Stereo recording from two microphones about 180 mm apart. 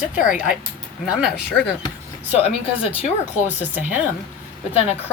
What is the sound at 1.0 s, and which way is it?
Speech, 5° right (ahead or behind).